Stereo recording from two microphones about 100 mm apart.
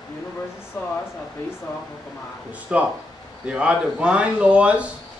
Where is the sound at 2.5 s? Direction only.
10° right (ahead or behind).